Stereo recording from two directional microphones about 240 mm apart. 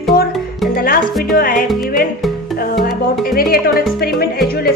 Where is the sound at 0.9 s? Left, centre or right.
Left.